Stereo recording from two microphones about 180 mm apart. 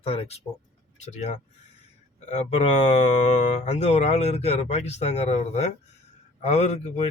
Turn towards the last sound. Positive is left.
turn(degrees=40)  # may be behind; listen again after turning